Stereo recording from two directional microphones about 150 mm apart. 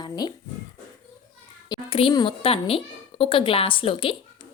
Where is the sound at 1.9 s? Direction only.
30° left (ahead or behind).